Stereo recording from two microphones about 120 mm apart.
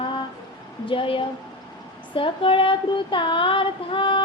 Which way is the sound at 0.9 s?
45° left (ahead or behind).